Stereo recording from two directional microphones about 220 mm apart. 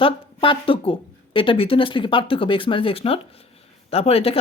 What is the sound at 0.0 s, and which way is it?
A woman's voice, 25° left (ahead or behind).